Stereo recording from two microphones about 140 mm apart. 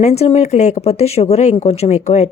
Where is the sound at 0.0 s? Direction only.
50° left (ahead or behind).